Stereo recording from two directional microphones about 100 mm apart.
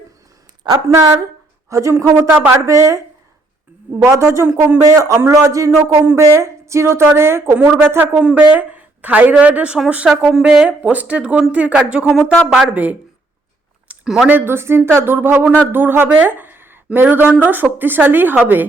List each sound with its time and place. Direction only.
0.7 s a woman's voice: 45° right (ahead or behind)
1.7 s speech: 30° right (ahead or behind)
2.1 s a woman's voice: 15° right (ahead or behind)
2.6 s speech: 30° right (ahead or behind)
4.0 s speech: 30° right (ahead or behind)
4.8 s a man's voice: 35° right (ahead or behind)
8.1 s a woman's voice: 10° right (ahead or behind)
13.8 s a sound: 5° right (ahead or behind)
14.3 s speech: 20° right (ahead or behind)